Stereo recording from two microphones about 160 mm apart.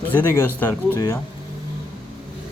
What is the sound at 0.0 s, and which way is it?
Speech, 10° left (ahead or behind).